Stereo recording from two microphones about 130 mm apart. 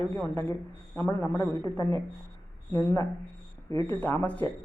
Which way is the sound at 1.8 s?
40° right (ahead or behind).